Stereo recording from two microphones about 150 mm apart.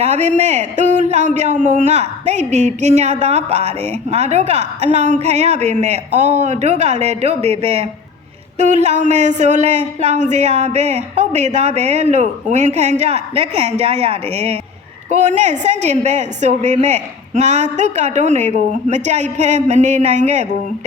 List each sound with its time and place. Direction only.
0.0 s speech: 50° right (ahead or behind)